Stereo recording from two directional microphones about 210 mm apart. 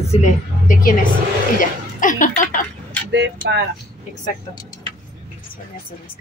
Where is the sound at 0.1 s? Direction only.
35° left (ahead or behind).